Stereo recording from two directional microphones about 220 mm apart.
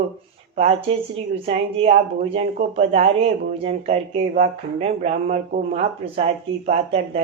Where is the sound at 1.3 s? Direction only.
25° right (ahead or behind).